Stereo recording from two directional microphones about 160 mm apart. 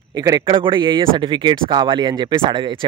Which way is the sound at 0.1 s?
25° right (ahead or behind).